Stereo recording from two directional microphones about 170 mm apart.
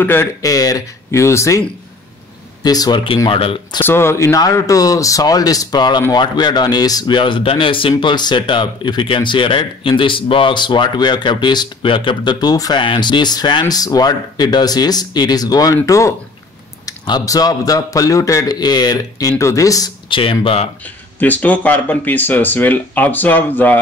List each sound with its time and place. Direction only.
0.0 s speech: 15° left (ahead or behind); by 3.8 s 30° left (ahead or behind)
3.8 s speech: 15° left (ahead or behind); by 20.6 s 30° left (ahead or behind)
21.2 s speech: 10° left (ahead or behind)